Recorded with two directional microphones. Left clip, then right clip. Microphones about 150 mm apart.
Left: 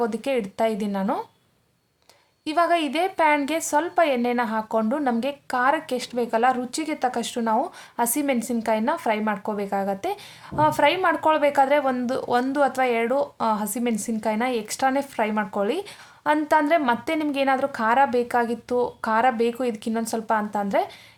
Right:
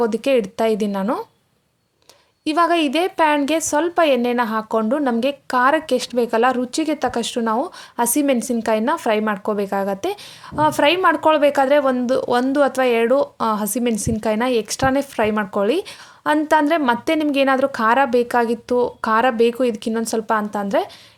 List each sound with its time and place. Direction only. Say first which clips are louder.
0.0 s speech: right 7 dB; 30° right (ahead or behind)
2.4 s speech: right 4 dB; 25° right (ahead or behind)